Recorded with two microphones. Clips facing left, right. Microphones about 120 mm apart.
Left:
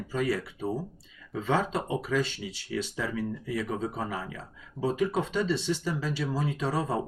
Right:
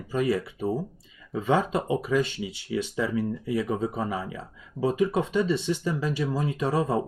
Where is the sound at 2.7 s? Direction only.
15° right (ahead or behind).